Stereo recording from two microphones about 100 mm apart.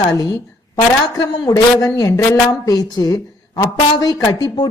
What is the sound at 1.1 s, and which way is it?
A woman's voice, 35° left (ahead or behind).